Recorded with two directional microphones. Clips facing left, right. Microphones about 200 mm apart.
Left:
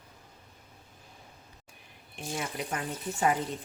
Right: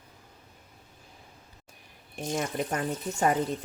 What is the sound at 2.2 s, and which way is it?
Speech, 45° right (ahead or behind).